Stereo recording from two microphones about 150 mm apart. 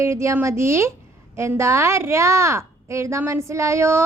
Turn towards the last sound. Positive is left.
turn(degrees=-20)  # may be behind; listen again after turning